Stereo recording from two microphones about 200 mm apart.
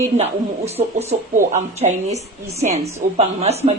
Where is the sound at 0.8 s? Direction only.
30° right (ahead or behind).